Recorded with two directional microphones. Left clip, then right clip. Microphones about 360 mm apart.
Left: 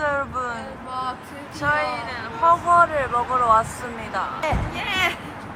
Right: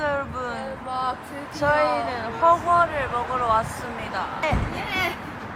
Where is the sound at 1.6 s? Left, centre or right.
Centre.